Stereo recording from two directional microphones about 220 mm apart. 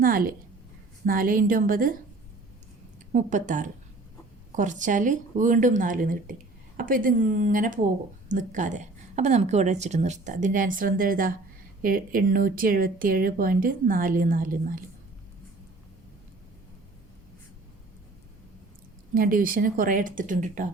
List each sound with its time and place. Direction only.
0.0 s a woman's voice: 40° right (ahead or behind)
3.1 s a woman's voice: 35° right (ahead or behind)
19.1 s a woman's voice: 40° right (ahead or behind)